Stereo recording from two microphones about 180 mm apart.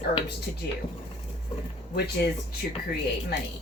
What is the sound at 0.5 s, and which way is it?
Speech, 50° left (ahead or behind).